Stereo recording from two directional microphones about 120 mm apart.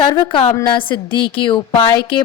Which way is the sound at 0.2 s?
45° left (ahead or behind).